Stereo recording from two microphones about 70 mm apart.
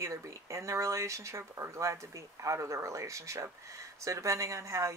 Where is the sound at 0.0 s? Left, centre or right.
Right.